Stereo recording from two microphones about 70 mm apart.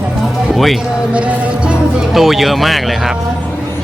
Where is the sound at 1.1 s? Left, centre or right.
Centre.